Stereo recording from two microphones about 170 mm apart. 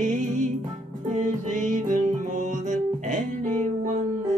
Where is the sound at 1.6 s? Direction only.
50° right (ahead or behind).